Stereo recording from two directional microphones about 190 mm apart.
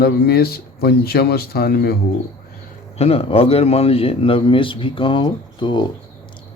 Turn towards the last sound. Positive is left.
turn(degrees=25)  # may be behind; listen again after turning